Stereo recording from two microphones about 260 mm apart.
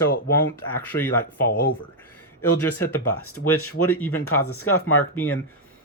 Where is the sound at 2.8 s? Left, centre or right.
Left.